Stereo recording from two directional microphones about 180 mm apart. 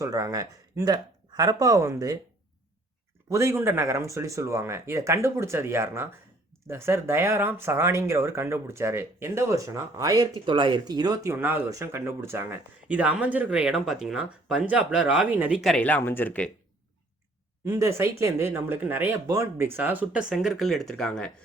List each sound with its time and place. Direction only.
0.0 s speech: 20° right (ahead or behind)
3.2 s speech: 15° right (ahead or behind); by 16.5 s 10° left (ahead or behind)
17.7 s speech: 15° right (ahead or behind); by 21.2 s 5° left (ahead or behind)